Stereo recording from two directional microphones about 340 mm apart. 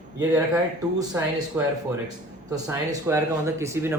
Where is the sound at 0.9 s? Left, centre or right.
Centre.